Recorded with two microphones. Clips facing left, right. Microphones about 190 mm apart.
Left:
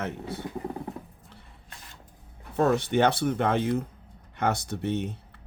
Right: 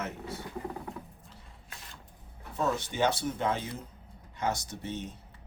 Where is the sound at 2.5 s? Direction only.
60° left (ahead or behind).